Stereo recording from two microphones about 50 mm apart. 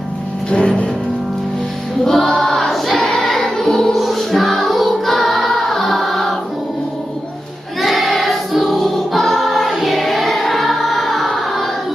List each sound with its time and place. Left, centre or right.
0.5 s music: centre
2.0 s choir: centre
7.8 s choir: centre